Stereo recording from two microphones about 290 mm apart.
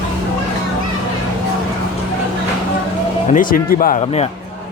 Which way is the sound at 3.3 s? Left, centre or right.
Left.